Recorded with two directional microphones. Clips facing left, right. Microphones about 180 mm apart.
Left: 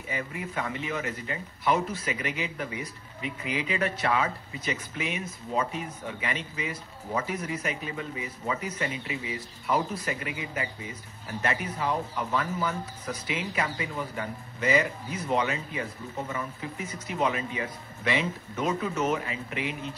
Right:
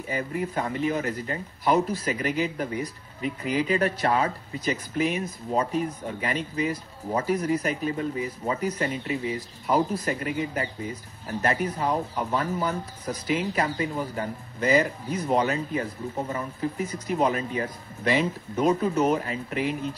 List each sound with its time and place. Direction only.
0.1 s speech: 40° right (ahead or behind)